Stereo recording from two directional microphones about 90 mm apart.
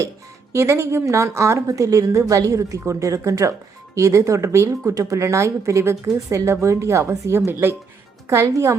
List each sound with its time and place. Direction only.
0.5 s speech: 30° right (ahead or behind)